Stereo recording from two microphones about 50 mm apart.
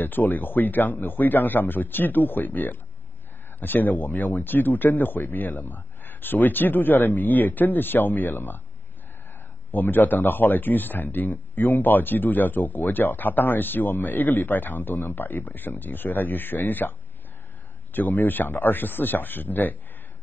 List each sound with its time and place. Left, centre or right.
0.0 s speech: left
9.7 s speech: left
17.9 s speech: left